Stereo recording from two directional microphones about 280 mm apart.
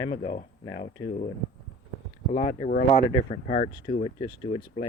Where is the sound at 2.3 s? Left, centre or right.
Left.